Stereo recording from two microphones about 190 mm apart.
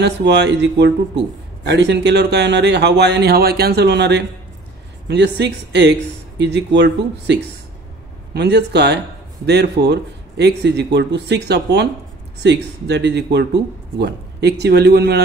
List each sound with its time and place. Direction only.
0.0 s a man's voice: 65° right (ahead or behind)